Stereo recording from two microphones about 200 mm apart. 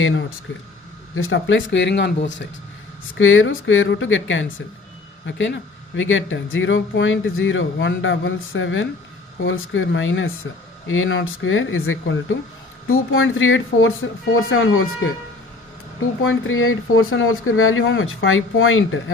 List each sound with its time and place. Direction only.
1.1 s speech: 80° left; by 2.1 s 60° left (ahead or behind)
3.2 s speech: 80° left
5.2 s speech: 65° left (ahead or behind)
10.8 s speech: 85° left
16.2 s speech: 80° left